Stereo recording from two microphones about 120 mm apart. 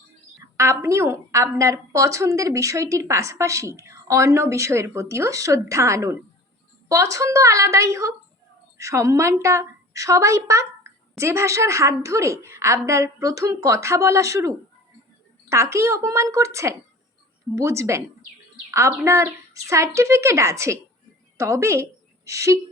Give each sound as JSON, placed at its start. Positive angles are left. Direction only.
{"t": 0.5, "sound": "a woman's voice", "side_deg": -25}